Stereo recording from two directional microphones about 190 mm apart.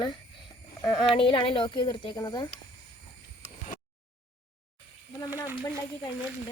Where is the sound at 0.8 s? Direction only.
25° left (ahead or behind).